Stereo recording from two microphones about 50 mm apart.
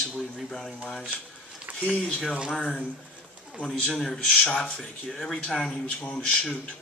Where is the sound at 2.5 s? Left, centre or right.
Centre.